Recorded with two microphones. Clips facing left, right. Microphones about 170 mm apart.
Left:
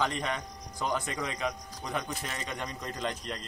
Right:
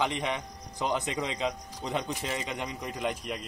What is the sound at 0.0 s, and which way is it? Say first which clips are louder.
A man's voice: right 1 dB; 15° right (ahead or behind).